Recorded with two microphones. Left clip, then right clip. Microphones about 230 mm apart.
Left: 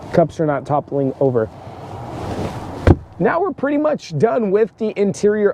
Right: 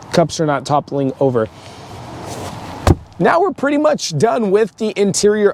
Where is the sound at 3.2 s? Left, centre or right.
Right.